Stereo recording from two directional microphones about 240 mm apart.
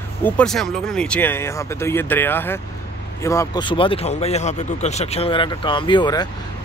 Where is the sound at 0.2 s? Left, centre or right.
Centre.